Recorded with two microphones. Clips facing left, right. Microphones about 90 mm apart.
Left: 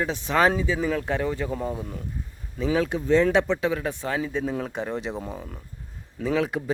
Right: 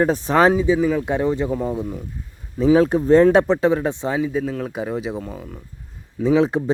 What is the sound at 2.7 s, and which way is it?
Speech, 35° right (ahead or behind).